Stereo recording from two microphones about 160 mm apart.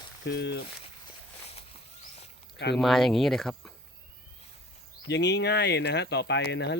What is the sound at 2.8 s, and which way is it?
Speech, centre (ahead or behind).